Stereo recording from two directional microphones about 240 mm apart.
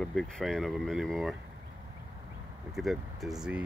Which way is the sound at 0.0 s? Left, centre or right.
Centre.